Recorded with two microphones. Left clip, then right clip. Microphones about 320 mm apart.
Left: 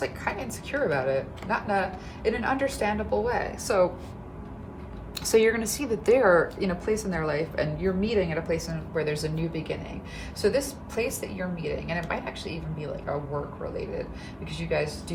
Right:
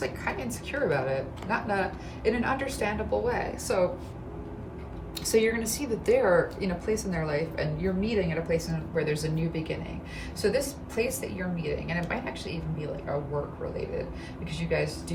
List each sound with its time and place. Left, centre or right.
0.0 s a woman's voice: centre
5.2 s a woman's voice: centre
14.5 s a woman's voice: centre